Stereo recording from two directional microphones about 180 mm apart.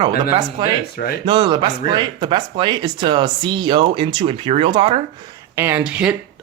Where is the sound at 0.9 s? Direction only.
60° left (ahead or behind).